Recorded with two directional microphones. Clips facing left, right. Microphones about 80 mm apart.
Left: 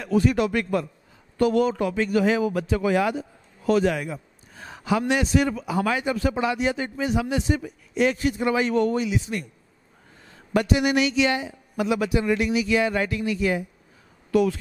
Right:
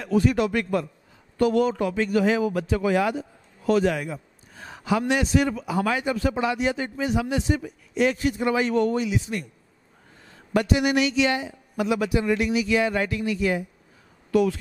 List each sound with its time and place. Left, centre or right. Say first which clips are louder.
0.0 s a man's voice: even; centre
10.5 s a man's voice: even; centre